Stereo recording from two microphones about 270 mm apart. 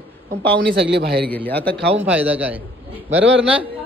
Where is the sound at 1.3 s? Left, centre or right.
Centre.